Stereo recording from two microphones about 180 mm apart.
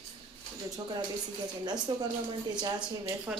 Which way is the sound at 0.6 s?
20° right (ahead or behind).